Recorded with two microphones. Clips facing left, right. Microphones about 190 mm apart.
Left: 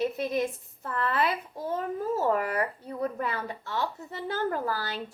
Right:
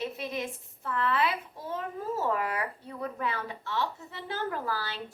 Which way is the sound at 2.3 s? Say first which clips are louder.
Left 4 dB; 45° left (ahead or behind).